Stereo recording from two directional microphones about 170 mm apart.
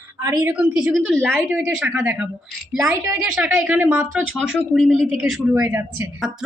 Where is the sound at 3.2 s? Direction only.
5° right (ahead or behind).